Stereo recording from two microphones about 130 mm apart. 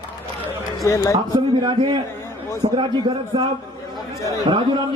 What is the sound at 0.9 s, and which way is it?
Speech, 25° left (ahead or behind).